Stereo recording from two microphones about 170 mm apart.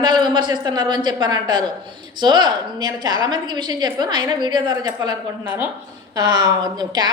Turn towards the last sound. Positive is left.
turn(degrees=-25)  # may be behind; listen again after turning